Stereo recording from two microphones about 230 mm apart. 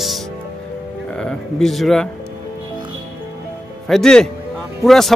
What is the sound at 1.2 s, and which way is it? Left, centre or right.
Speech, centre.